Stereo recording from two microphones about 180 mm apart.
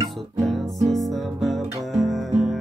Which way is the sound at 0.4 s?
Centre (ahead or behind).